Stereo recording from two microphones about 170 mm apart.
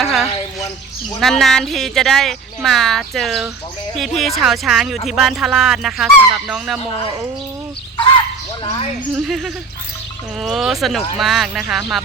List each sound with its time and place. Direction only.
0.0 s a sound: centre (ahead or behind)
1.2 s speech: centre (ahead or behind)
7.9 s speech: 30° left (ahead or behind)
9.1 s speech: centre (ahead or behind)